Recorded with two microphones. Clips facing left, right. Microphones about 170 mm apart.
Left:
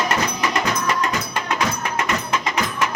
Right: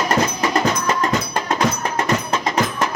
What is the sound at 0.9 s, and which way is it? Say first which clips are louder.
Music: right 3 dB; 35° right (ahead or behind).